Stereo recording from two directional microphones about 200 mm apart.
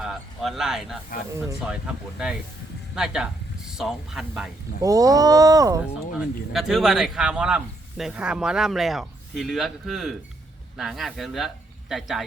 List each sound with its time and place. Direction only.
0.0 s speech: centre (ahead or behind)
4.8 s speech: 15° right (ahead or behind)
6.1 s speech: centre (ahead or behind)